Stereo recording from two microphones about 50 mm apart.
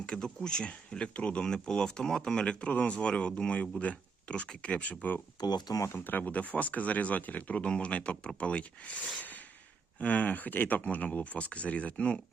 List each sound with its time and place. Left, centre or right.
0.0 s speech: centre